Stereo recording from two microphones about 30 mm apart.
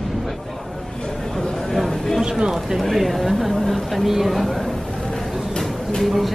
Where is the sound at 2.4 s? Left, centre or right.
Centre.